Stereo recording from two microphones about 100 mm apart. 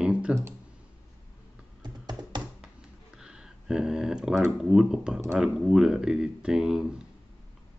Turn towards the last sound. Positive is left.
turn(degrees=-5)  # may be behind; listen again after turning